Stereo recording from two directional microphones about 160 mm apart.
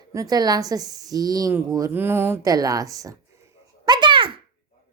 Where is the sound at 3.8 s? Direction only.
25° right (ahead or behind).